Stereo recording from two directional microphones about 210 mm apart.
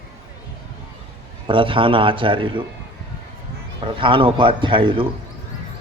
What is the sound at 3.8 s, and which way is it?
A man's voice, 25° right (ahead or behind).